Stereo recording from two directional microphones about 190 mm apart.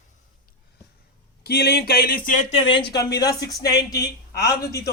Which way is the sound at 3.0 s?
20° left (ahead or behind).